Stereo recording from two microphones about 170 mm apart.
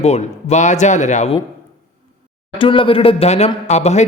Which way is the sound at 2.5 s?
30° left (ahead or behind).